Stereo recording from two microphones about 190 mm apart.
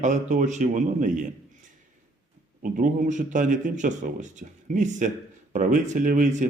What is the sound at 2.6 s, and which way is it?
A man's voice, 45° right (ahead or behind).